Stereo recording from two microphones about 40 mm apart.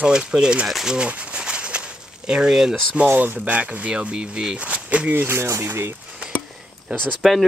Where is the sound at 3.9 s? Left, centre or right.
Right.